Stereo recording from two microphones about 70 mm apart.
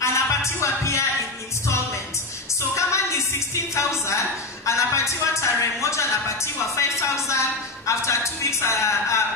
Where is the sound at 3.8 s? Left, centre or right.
Left.